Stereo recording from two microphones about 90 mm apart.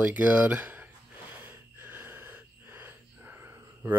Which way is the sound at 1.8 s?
25° right (ahead or behind).